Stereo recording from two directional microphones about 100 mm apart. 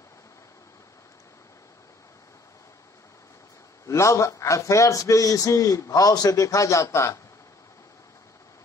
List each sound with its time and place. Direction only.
3.8 s speech: 30° left (ahead or behind)